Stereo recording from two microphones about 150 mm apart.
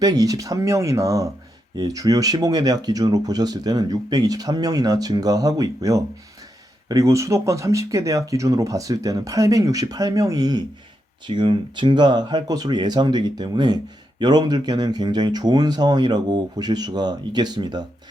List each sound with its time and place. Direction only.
0.0 s speech: 25° right (ahead or behind)